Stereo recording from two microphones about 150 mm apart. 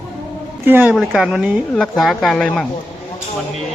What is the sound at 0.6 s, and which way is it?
Speech, 15° right (ahead or behind).